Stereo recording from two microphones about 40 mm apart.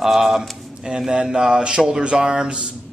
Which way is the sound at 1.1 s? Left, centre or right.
Centre.